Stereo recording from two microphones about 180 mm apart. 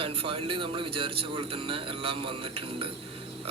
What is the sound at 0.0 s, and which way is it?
A man's voice, 30° right (ahead or behind).